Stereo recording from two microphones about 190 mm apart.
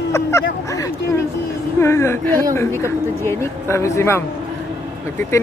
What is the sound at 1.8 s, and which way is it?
Speech, 15° left (ahead or behind).